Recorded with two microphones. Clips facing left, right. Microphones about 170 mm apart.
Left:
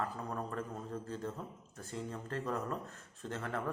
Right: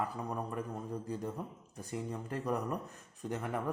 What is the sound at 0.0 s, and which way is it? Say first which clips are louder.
A man's voice: right 2 dB; 15° right (ahead or behind).